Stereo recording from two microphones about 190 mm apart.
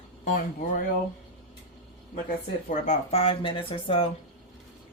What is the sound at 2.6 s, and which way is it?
Speech, 40° left (ahead or behind).